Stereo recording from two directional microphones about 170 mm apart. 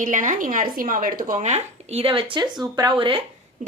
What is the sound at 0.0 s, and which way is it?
A woman's voice, 50° right (ahead or behind).